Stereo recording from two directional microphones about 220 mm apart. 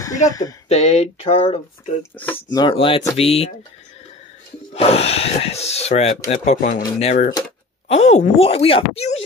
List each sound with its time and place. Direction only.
0.3 s speech: 15° left (ahead or behind)
0.7 s speech: 30° left (ahead or behind)
2.1 s speech: 10° left (ahead or behind)
2.6 s speech: 25° left (ahead or behind)
4.7 s speech: 30° left (ahead or behind)
6.8 s speech: 20° left (ahead or behind)
7.1 s speech: 35° left (ahead or behind)